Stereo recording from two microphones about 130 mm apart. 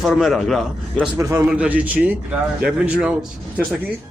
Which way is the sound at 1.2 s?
20° right (ahead or behind).